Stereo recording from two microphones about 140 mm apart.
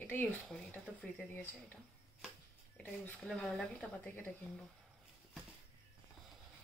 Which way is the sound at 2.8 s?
10° left (ahead or behind).